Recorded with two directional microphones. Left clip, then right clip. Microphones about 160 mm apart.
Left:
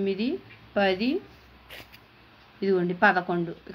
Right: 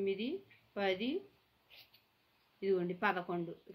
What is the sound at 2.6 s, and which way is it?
Speech, 40° left (ahead or behind).